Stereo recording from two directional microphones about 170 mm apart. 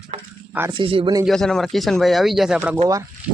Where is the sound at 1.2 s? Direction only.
5° left (ahead or behind).